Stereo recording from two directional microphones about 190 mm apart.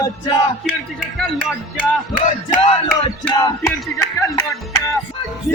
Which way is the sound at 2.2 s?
30° left (ahead or behind).